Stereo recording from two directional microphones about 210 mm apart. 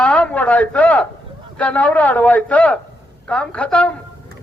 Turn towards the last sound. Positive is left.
turn(degrees=5)  # may be behind; listen again after turning